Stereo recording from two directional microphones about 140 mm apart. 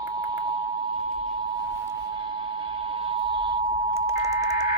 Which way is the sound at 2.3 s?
40° right (ahead or behind).